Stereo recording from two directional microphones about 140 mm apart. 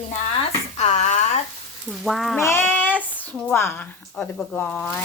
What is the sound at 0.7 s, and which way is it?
Speech, 55° left (ahead or behind).